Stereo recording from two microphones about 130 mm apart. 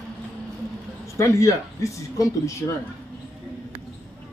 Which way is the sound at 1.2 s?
25° left (ahead or behind).